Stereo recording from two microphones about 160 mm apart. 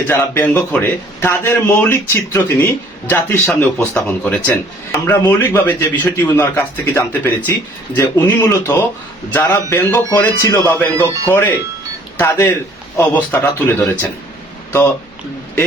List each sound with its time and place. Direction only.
0.1 s speech: 15° left (ahead or behind)